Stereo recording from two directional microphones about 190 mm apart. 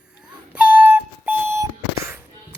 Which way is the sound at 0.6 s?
5° right (ahead or behind).